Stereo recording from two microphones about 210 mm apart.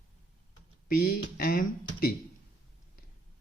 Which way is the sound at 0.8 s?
45° left (ahead or behind).